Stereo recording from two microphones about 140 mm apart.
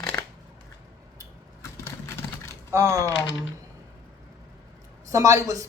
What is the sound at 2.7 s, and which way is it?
Speech, 20° right (ahead or behind).